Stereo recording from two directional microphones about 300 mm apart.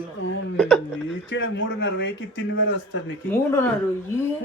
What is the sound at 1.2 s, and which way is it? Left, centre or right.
Speech, left.